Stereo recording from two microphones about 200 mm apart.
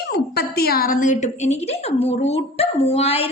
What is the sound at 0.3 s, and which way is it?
A woman's voice, 50° left (ahead or behind).